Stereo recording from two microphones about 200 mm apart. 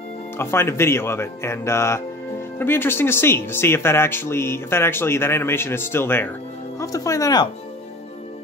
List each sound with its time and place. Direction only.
0.4 s speech: 10° left (ahead or behind)